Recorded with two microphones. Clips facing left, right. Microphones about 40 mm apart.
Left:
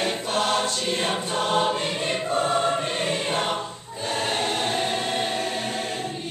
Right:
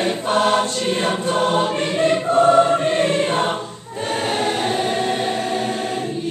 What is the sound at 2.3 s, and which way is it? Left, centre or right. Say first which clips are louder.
Choir: right 10 dB; right.